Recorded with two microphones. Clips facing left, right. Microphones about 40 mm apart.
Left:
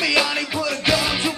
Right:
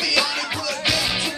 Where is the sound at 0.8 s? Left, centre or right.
Centre.